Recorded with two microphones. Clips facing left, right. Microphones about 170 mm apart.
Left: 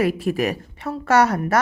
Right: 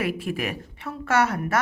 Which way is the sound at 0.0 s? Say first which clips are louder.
Left 7 dB; 40° left (ahead or behind).